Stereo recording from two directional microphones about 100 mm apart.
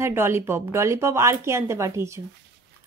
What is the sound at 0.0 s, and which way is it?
Speech, 25° right (ahead or behind).